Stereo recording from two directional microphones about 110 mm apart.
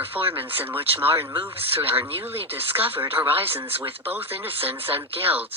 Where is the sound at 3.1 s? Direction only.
60° right (ahead or behind).